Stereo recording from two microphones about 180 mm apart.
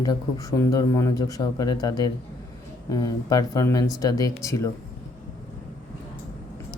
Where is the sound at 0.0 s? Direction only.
15° left (ahead or behind).